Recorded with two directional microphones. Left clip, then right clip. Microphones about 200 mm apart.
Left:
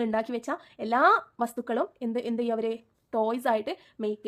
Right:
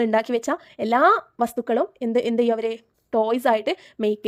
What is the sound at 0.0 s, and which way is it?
Speech, 35° right (ahead or behind).